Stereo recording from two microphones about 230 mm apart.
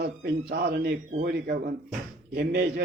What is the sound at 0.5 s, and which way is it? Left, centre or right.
A man's voice, right.